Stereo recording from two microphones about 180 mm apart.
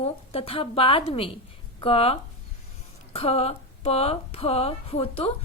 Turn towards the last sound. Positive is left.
turn(degrees=30)  # may be behind; listen again after turning